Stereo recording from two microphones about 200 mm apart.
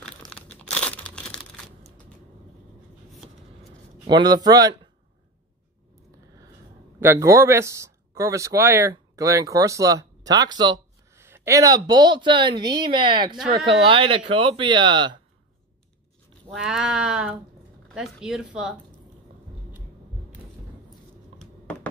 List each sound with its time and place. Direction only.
0.0 s crumpling: 5° left (ahead or behind)
4.1 s speech: 20° right (ahead or behind)
7.0 s speech: 15° right (ahead or behind)
16.6 s speech: 5° right (ahead or behind)